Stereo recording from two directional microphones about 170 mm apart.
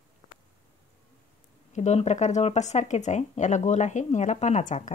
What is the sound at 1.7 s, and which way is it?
Speech, 45° left (ahead or behind).